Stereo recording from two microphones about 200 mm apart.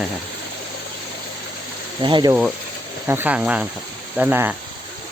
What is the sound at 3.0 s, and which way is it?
Speech, 10° right (ahead or behind).